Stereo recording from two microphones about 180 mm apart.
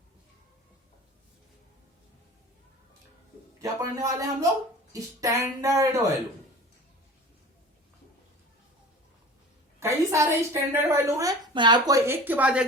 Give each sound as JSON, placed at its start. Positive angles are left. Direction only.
{"t": 3.6, "sound": "speech", "side_deg": -20}
{"t": 9.8, "sound": "a woman's voice", "side_deg": -15}